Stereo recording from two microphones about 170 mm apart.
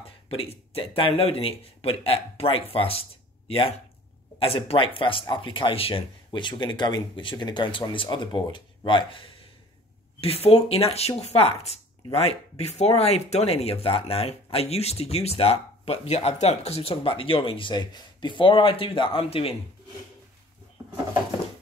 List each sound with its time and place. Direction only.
0.3 s speech: 35° left (ahead or behind)